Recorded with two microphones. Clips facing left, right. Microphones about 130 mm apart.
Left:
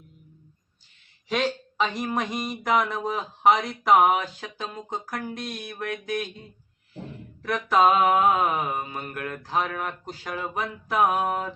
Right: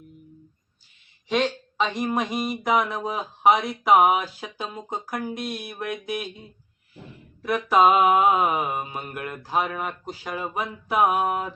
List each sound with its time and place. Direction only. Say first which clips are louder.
1.3 s a sound: right 2 dB; centre (ahead or behind)
2.0 s speech: right 3 dB; 5° right (ahead or behind)
7.4 s speech: right 2 dB; 10° right (ahead or behind)